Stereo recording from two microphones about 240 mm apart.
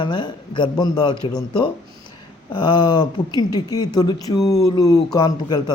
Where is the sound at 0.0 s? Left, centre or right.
Centre.